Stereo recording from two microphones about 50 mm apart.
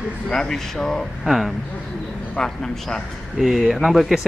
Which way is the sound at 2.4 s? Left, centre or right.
Centre.